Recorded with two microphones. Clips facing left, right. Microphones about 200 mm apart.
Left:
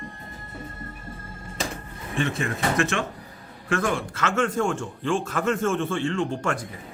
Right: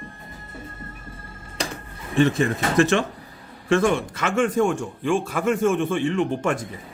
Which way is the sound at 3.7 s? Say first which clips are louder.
Right 6 dB; 25° right (ahead or behind).